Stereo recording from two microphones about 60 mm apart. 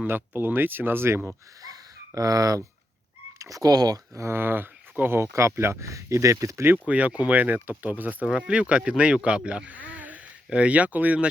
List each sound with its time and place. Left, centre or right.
0.1 s speech: right
1.6 s a sound: right
3.3 s speech: right
4.2 s speech: right
5.3 s speech: right
6.8 s speech: right
8.3 s speech: centre